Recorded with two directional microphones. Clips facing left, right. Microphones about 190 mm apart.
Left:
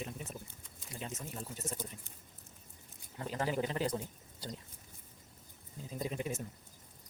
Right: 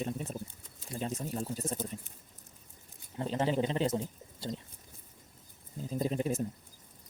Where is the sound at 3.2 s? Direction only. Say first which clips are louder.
Right 5 dB; 25° right (ahead or behind).